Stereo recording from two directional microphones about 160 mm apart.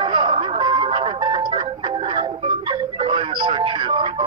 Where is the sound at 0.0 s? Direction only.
30° right (ahead or behind).